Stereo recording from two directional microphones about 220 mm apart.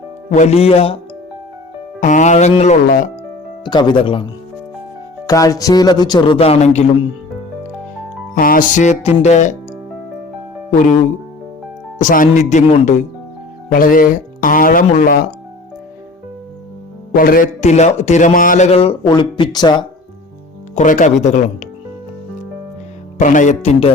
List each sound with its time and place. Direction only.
0.3 s music: 30° left (ahead or behind)
2.0 s a man's voice: 35° left (ahead or behind)
3.6 s music: 20° left (ahead or behind)
8.4 s a man's voice: 40° left (ahead or behind)
10.7 s speech: 35° left (ahead or behind)
11.9 s a man's voice: 35° left (ahead or behind)
17.2 s a man's voice: 40° left (ahead or behind); by 19.8 s 20° left (ahead or behind)
20.7 s a man's voice: 35° left (ahead or behind)
23.1 s a man's voice: 35° left (ahead or behind)